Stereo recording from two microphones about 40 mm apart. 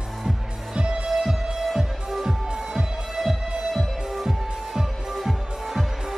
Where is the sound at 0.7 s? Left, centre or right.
Right.